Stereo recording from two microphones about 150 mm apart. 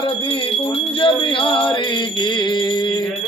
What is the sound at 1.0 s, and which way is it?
Mantra, 35° left (ahead or behind).